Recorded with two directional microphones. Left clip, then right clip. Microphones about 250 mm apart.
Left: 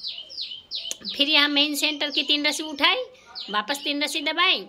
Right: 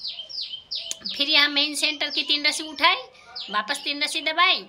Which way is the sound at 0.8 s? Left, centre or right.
Centre.